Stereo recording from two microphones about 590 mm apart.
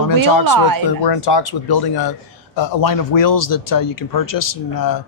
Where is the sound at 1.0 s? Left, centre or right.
Left.